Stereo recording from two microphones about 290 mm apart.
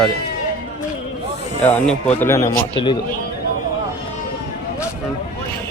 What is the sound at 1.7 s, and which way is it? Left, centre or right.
Speech, centre.